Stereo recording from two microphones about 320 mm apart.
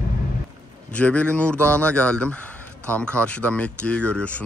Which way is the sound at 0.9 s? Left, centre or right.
Centre.